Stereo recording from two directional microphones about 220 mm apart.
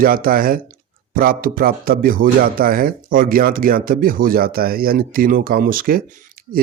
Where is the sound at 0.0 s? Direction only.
40° right (ahead or behind).